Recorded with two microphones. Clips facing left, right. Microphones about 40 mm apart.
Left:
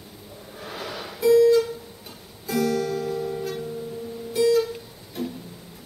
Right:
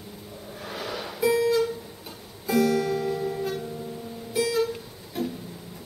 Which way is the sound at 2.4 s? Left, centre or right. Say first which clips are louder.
Right 1 dB; centre.